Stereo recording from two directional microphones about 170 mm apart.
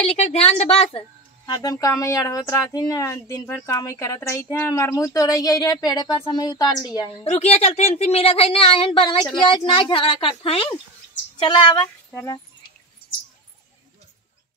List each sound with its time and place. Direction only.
0.0 s a woman's voice: 40° left (ahead or behind)
1.4 s speech: 20° left (ahead or behind)
7.2 s a woman's voice: 40° left (ahead or behind)
12.1 s speech: 10° left (ahead or behind)